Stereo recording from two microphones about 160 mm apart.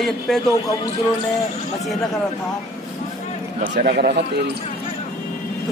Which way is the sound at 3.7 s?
80° right.